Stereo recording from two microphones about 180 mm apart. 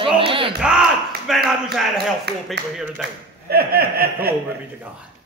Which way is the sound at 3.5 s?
60° right (ahead or behind).